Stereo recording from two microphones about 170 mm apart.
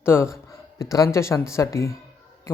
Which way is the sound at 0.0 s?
15° left (ahead or behind).